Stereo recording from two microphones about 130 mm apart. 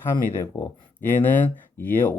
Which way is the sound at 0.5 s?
20° left (ahead or behind).